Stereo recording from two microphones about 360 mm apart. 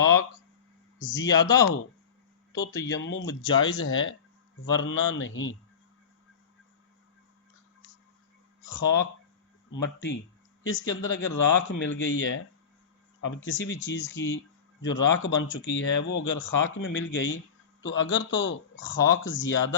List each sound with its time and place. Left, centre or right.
0.9 s a man's voice: left
1.2 s speech: centre
2.6 s speech: left
8.6 s speech: left